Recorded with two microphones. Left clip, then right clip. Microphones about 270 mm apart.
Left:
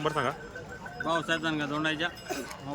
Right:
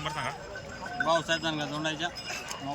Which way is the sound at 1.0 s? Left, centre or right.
Centre.